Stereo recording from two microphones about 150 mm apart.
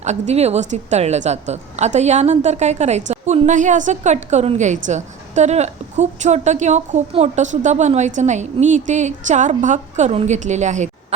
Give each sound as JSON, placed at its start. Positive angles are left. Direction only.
{"t": 0.0, "sound": "a woman's voice", "side_deg": -50}